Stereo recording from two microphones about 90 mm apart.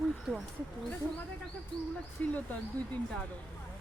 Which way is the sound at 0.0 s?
Centre (ahead or behind).